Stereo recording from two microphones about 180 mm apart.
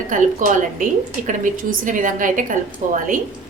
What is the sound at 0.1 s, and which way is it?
A woman's voice, 45° right (ahead or behind).